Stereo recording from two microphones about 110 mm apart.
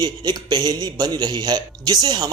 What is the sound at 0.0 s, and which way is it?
A man's voice, 40° right (ahead or behind).